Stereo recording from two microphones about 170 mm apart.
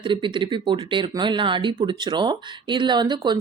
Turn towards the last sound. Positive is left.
turn(degrees=-25)  # may be behind; listen again after turning